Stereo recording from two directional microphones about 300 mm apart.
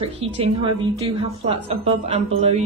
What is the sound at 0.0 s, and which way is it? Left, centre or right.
A woman's voice, centre.